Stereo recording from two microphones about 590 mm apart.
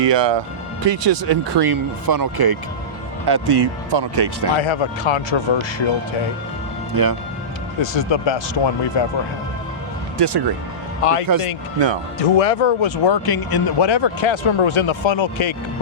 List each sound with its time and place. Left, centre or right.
0.0 s speech: right
4.5 s speech: left
6.9 s speech: right
7.8 s speech: left
10.2 s speech: right
11.0 s speech: left